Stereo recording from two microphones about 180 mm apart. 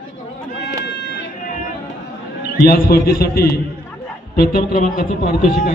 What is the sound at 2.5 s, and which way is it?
A man's voice, 55° left (ahead or behind).